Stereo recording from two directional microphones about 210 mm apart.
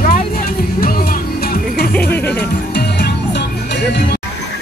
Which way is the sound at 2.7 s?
50° left (ahead or behind).